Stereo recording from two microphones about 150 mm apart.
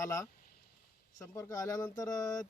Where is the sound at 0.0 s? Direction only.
20° left (ahead or behind).